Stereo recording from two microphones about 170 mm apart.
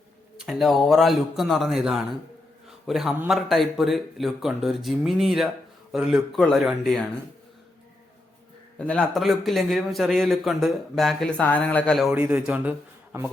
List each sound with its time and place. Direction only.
0.3 s a man's voice: centre (ahead or behind)
8.8 s a man's voice: 5° left (ahead or behind)